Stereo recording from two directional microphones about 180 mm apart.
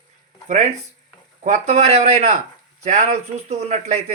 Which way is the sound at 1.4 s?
40° right (ahead or behind).